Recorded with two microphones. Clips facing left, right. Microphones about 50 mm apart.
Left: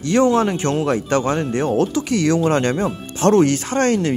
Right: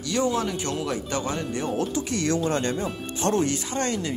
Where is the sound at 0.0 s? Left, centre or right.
Left.